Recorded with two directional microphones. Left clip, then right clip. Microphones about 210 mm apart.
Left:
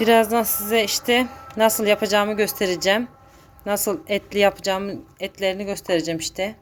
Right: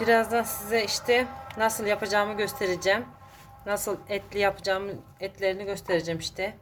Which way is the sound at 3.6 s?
40° left (ahead or behind).